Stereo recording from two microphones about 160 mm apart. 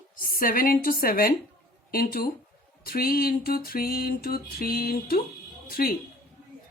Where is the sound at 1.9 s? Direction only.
70° left (ahead or behind).